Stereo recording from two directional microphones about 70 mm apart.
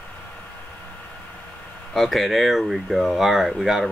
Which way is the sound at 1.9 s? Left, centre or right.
Centre.